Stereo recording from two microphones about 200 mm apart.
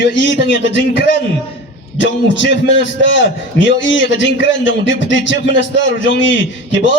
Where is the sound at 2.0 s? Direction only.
65° left (ahead or behind).